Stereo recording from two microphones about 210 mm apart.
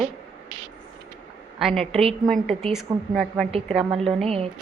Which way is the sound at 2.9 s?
20° right (ahead or behind).